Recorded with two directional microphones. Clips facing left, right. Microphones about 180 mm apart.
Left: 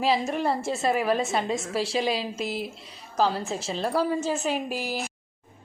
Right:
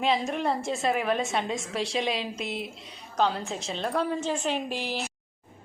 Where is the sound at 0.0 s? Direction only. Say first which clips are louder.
Left 2 dB; centre (ahead or behind).